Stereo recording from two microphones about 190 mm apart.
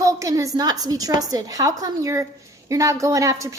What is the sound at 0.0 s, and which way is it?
A woman's voice, 15° right (ahead or behind).